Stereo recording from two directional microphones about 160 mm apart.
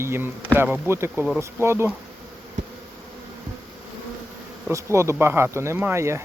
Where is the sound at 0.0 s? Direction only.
15° right (ahead or behind).